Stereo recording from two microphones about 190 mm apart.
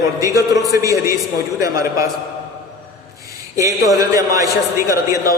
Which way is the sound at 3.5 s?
15° right (ahead or behind).